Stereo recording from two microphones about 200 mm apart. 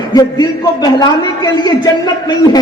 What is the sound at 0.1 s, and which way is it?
A man's voice, 20° left (ahead or behind).